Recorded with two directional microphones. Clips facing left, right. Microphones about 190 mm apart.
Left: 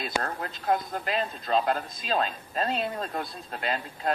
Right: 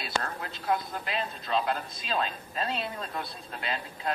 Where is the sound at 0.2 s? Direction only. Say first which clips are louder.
Left 4 dB; 40° left (ahead or behind).